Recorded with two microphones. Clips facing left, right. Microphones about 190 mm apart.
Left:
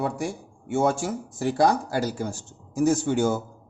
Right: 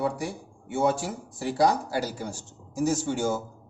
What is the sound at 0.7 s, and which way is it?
A man's voice, 45° left (ahead or behind).